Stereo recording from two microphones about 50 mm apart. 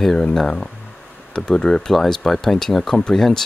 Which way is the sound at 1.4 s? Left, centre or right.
Centre.